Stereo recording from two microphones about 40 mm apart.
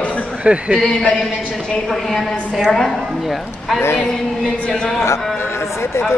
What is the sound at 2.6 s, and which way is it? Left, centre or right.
Speech, centre.